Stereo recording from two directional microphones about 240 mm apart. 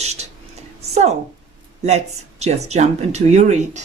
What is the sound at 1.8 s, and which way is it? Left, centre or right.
Speech, right.